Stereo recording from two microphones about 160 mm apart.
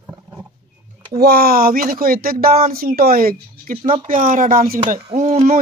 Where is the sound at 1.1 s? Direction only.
75° right (ahead or behind).